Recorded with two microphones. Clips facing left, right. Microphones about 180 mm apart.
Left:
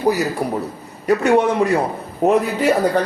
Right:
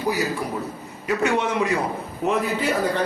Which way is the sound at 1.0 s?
35° left (ahead or behind).